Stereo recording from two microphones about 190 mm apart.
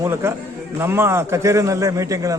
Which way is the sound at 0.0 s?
10° right (ahead or behind).